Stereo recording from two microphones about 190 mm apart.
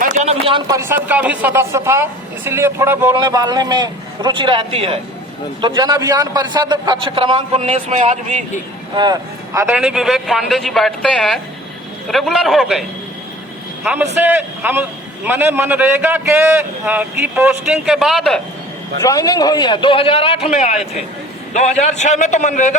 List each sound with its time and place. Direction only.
0.0 s speech: 40° right (ahead or behind); by 3.2 s 10° right (ahead or behind)
3.2 s a man's voice: 25° right (ahead or behind); by 8.4 s 40° right (ahead or behind)
9.6 s a man's voice: 10° right (ahead or behind)
14.2 s a man's voice: 10° right (ahead or behind)
18.9 s a man's voice: 20° left (ahead or behind); by 22.8 s 40° left (ahead or behind)